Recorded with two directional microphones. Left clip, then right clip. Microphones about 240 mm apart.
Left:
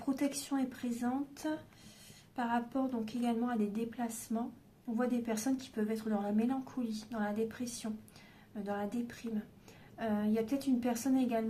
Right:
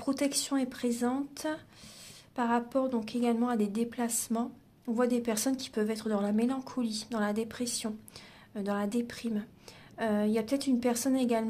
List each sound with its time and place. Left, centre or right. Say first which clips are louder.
0.0 s speech: right 5 dB; right